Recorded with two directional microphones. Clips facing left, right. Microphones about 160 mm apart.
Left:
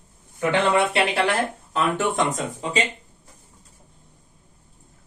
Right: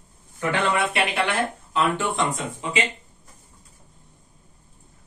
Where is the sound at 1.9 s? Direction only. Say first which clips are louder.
Left 2 dB; 40° left (ahead or behind).